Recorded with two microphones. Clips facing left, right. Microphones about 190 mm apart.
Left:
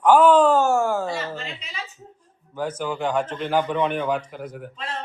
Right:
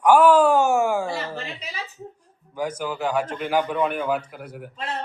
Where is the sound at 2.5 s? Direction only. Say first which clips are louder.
Even; 10° right (ahead or behind).